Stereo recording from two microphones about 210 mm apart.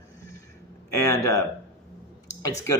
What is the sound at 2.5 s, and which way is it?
Speech, 15° left (ahead or behind).